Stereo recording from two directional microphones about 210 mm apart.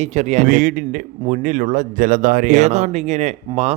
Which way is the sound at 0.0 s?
30° right (ahead or behind).